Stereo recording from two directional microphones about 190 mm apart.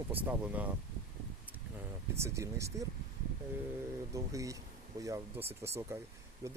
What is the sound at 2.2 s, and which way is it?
Speech, 15° right (ahead or behind).